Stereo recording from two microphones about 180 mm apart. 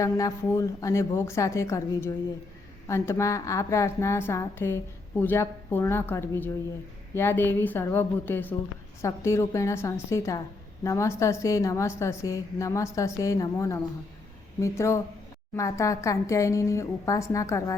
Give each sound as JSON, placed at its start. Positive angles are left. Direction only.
{"t": 0.0, "sound": "a woman's voice", "side_deg": 20}